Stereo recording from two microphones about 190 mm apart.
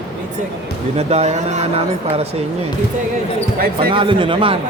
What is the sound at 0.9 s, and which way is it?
Speech, 35° right (ahead or behind).